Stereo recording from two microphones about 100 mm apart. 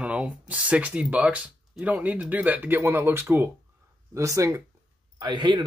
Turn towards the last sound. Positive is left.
turn(degrees=-50)  # may be behind; listen again after turning